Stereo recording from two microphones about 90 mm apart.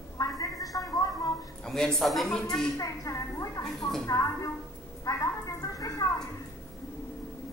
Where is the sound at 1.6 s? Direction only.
5° left (ahead or behind).